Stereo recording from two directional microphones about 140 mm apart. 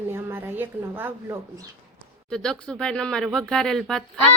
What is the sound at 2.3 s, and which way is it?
Speech, 5° left (ahead or behind).